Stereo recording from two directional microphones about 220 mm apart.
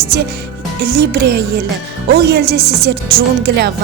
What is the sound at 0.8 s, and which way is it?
Music, 50° right (ahead or behind).